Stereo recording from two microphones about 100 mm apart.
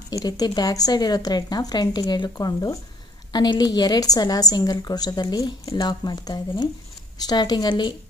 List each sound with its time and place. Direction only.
0.1 s a woman's voice: 40° left (ahead or behind)